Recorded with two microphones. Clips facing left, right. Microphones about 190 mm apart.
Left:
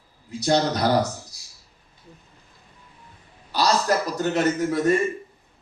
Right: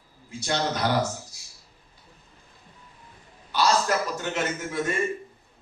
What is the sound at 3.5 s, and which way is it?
A man's voice, 40° left (ahead or behind).